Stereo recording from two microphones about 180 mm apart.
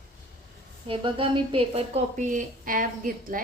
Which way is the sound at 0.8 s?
30° right (ahead or behind).